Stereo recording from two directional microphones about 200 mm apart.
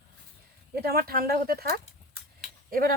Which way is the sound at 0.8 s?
50° right (ahead or behind).